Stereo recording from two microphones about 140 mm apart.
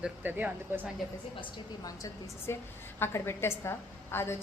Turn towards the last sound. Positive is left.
turn(degrees=15)  # may be behind; listen again after turning